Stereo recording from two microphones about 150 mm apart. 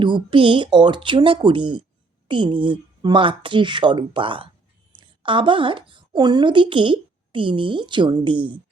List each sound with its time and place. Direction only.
0.0 s a woman's voice: 30° right (ahead or behind)